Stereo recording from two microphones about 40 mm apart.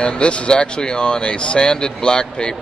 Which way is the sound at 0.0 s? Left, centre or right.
Left.